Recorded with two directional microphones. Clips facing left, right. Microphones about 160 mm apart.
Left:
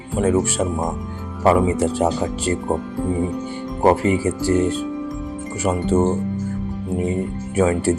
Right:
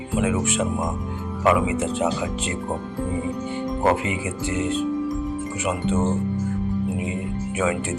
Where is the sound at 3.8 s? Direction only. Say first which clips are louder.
Left 7 dB; 40° left (ahead or behind).